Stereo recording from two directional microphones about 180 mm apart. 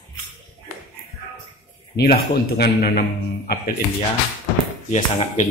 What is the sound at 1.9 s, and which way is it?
Speech, 60° left (ahead or behind).